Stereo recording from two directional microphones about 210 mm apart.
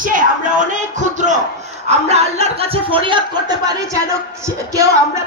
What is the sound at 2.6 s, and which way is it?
Speech, 25° right (ahead or behind).